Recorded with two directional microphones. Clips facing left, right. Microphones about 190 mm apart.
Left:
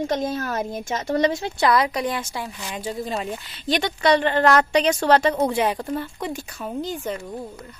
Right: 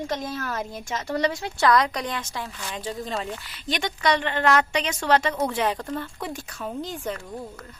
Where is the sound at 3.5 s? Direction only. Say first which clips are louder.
Left 6 dB; 30° left (ahead or behind).